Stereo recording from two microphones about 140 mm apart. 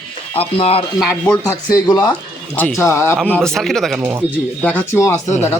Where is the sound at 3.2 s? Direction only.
5° left (ahead or behind).